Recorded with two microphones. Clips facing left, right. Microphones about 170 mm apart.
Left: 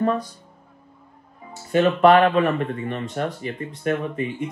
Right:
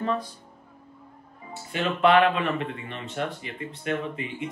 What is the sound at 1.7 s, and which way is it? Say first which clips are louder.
Speech: left 6 dB; 45° left (ahead or behind).